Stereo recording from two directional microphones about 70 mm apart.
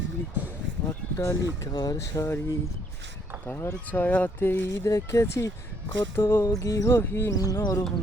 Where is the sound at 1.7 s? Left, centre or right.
Left.